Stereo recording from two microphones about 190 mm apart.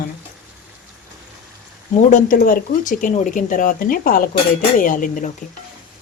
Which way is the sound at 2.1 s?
45° left (ahead or behind).